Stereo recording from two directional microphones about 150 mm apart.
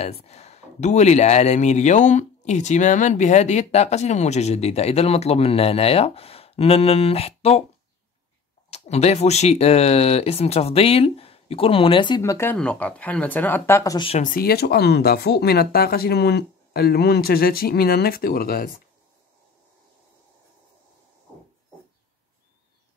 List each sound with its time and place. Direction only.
0.0 s speech: 45° left (ahead or behind)
8.6 s speech: 45° left (ahead or behind)
12.2 s speech: 15° left (ahead or behind)
13.9 s speech: 40° left (ahead or behind)
14.2 s speech: 80° left